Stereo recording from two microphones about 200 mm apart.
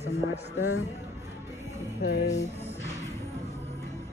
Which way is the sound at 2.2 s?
35° left (ahead or behind).